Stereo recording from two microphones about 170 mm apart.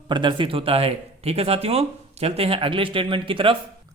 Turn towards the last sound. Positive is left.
turn(degrees=-30)  # may be behind; listen again after turning